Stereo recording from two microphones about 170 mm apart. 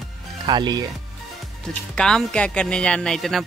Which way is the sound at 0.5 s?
25° right (ahead or behind).